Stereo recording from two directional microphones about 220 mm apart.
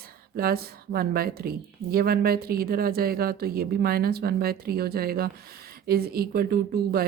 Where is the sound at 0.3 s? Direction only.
45° right (ahead or behind).